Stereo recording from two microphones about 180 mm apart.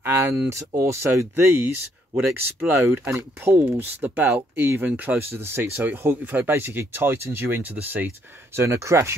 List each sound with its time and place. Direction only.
0.0 s speech: 15° right (ahead or behind)